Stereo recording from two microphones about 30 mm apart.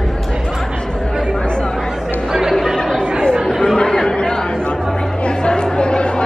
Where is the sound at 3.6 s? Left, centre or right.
Left.